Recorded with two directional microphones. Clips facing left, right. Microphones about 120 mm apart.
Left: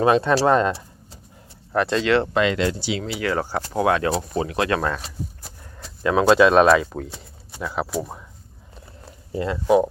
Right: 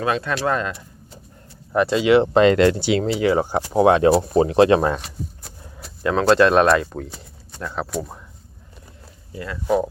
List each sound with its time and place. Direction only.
0.0 s speech: 25° left (ahead or behind)
1.7 s speech: 5° right (ahead or behind)
2.0 s speech: 15° right (ahead or behind)
2.3 s speech: 35° right (ahead or behind)
2.6 s speech: 60° right (ahead or behind)
3.2 s speech: 20° right (ahead or behind)
4.9 s a sound: centre (ahead or behind)
5.7 s speech: 5° right (ahead or behind)
9.3 s speech: 25° left (ahead or behind)
9.6 s speech: 10° left (ahead or behind)